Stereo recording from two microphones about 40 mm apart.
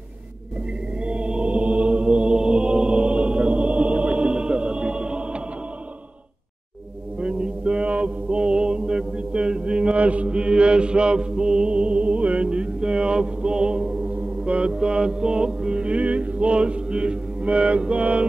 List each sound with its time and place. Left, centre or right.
1.0 s chant: right
7.2 s mantra: right